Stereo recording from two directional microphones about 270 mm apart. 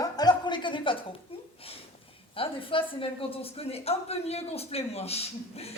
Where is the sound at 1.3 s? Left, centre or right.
Left.